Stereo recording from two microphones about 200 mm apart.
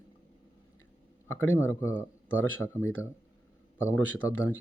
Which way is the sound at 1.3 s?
10° left (ahead or behind).